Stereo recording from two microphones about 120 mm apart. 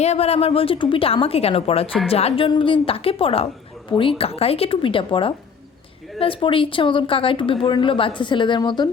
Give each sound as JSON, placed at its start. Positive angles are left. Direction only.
{"t": 0.0, "sound": "a woman's voice", "side_deg": 60}